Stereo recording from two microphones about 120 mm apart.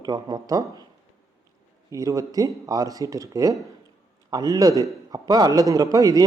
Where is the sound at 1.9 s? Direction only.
30° right (ahead or behind).